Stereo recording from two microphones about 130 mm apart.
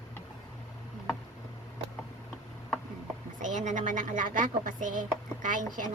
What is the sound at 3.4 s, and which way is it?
Speech, 70° right (ahead or behind).